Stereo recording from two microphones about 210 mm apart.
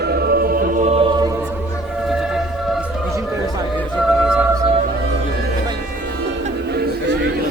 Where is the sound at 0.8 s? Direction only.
30° right (ahead or behind).